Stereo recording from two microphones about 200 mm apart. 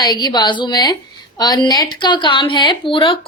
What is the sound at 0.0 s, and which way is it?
A woman's voice, 20° left (ahead or behind).